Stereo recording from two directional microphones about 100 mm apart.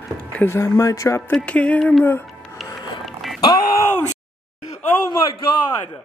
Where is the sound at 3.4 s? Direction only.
40° left (ahead or behind).